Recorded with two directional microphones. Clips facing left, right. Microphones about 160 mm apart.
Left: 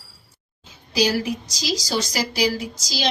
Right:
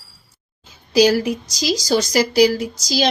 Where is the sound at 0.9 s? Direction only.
45° right (ahead or behind).